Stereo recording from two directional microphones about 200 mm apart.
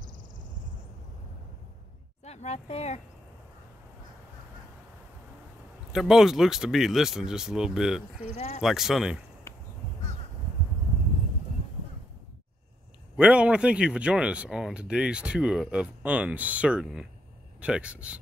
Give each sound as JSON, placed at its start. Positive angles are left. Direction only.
{"t": 2.2, "sound": "speech", "side_deg": 35}
{"t": 5.9, "sound": "speech", "side_deg": 0}
{"t": 8.4, "sound": "speech", "side_deg": 30}
{"t": 8.6, "sound": "speech", "side_deg": 0}
{"t": 9.5, "sound": "a sound", "side_deg": 15}
{"t": 13.1, "sound": "speech", "side_deg": -5}